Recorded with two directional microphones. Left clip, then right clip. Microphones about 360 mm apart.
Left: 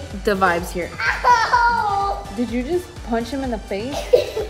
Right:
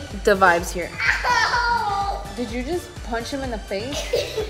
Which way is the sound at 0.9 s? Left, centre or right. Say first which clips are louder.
Left 4 dB; left.